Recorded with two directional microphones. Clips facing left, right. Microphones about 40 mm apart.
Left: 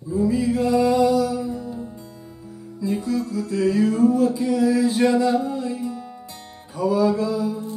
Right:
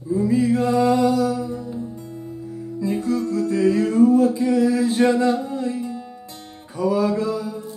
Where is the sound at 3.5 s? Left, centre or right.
Right.